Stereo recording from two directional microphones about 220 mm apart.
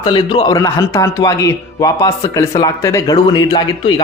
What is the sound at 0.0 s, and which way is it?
Speech, 20° left (ahead or behind).